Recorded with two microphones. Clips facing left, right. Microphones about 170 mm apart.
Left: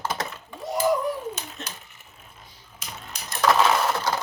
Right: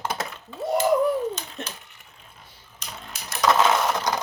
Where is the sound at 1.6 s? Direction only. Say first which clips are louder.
Right 3 dB; 60° right (ahead or behind).